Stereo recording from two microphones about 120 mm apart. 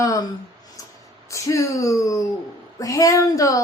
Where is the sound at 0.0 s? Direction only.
30° left (ahead or behind).